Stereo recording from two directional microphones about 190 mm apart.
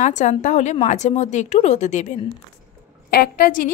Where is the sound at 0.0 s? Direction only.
40° left (ahead or behind).